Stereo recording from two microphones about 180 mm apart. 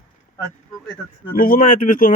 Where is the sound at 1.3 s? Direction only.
50° left (ahead or behind).